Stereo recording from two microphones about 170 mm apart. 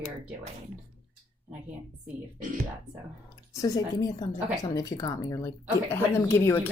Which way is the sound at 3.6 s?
20° left (ahead or behind).